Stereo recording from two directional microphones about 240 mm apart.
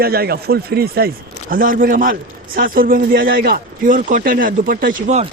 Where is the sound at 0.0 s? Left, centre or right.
Right.